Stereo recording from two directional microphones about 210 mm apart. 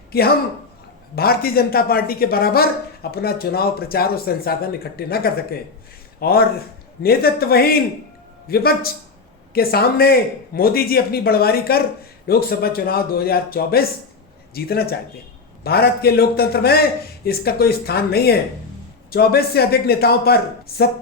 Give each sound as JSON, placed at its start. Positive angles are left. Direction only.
{"t": 0.1, "sound": "speech", "side_deg": 45}